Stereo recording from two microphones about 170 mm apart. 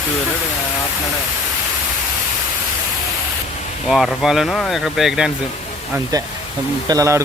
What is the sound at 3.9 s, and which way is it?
Speech, centre (ahead or behind).